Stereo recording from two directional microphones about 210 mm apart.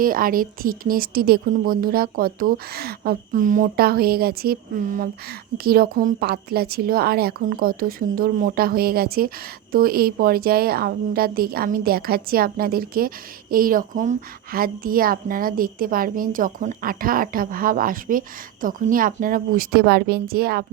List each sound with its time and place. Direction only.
0.0 s a woman's voice: 40° right (ahead or behind)